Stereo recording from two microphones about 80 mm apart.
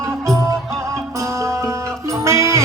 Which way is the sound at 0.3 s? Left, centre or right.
Right.